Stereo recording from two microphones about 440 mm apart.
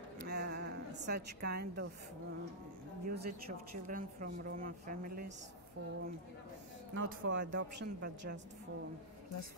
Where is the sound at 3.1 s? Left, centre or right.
Centre.